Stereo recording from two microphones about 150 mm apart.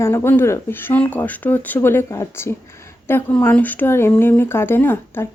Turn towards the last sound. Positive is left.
turn(degrees=15)  # may be behind; listen again after turning